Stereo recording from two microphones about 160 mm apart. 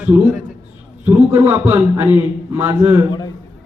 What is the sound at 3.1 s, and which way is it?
Speech, 25° left (ahead or behind).